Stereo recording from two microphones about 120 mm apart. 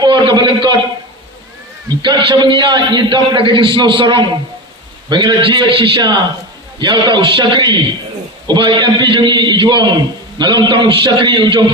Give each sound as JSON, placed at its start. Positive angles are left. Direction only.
{"t": 0.0, "sound": "a man's voice", "side_deg": -40}
{"t": 2.0, "sound": "a man's voice", "side_deg": -40}